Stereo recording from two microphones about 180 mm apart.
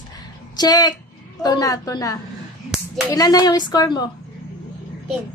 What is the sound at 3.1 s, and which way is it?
Speech, 20° left (ahead or behind).